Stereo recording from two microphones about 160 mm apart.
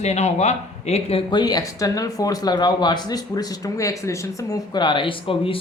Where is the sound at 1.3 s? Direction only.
25° left (ahead or behind).